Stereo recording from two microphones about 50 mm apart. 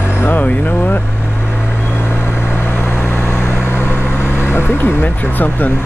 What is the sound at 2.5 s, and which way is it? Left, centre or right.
Vehicle, left.